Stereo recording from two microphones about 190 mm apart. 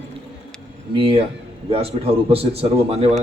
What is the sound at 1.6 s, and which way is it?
A man's voice, 30° right (ahead or behind).